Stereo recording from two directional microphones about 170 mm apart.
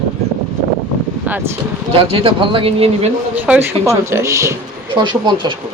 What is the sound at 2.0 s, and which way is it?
Speech, 35° right (ahead or behind).